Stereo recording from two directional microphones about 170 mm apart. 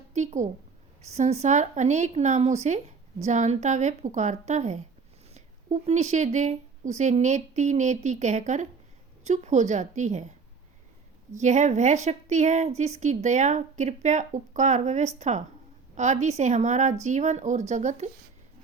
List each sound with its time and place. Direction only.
0.1 s a sound: 45° right (ahead or behind)
1.0 s a woman's voice: 40° right (ahead or behind)
11.3 s a woman's voice: 45° right (ahead or behind)